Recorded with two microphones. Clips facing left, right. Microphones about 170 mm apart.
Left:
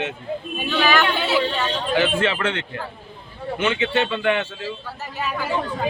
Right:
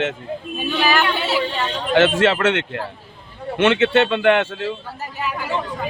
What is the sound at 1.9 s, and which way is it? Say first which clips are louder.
Speech: right 6 dB; 80° right.